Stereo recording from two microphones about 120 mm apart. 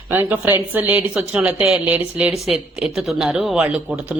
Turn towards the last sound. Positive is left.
turn(degrees=-15)  # may be behind; listen again after turning